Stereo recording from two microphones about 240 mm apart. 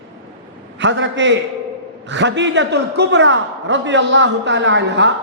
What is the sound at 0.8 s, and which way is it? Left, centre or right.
A man's voice, right.